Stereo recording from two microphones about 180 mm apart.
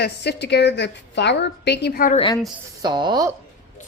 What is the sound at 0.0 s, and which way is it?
A woman's voice, 65° left (ahead or behind).